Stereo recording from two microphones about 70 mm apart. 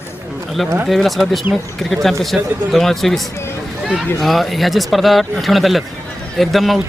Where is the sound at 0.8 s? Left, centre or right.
Centre.